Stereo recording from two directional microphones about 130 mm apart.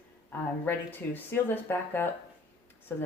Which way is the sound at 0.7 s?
15° left (ahead or behind).